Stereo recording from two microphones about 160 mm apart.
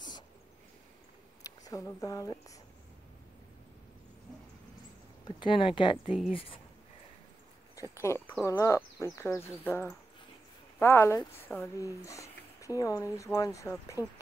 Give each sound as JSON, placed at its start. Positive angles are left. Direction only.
{"t": 1.6, "sound": "speech", "side_deg": 20}
{"t": 5.2, "sound": "speech", "side_deg": 30}
{"t": 6.0, "sound": "speech", "side_deg": 0}
{"t": 6.3, "sound": "speech", "side_deg": 35}
{"t": 7.7, "sound": "speech", "side_deg": 20}